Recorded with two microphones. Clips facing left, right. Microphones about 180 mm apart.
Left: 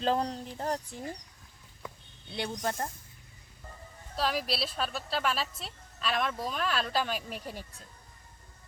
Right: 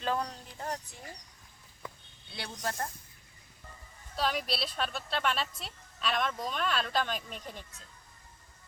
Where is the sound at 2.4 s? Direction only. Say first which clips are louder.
Left 3 dB; 20° left (ahead or behind).